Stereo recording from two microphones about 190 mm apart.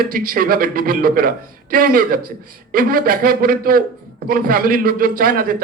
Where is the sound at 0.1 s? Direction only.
50° right (ahead or behind).